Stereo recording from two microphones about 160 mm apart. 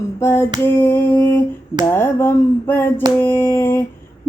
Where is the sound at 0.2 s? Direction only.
15° left (ahead or behind).